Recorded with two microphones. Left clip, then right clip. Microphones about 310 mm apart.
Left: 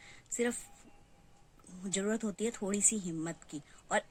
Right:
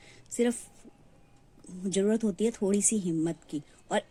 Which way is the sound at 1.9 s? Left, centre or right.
Centre.